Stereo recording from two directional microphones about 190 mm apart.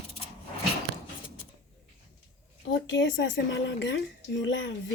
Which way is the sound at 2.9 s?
75° left (ahead or behind).